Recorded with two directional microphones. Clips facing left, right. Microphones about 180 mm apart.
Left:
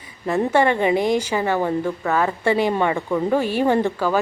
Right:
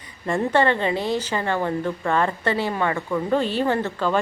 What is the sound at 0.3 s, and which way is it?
Speech, 5° left (ahead or behind).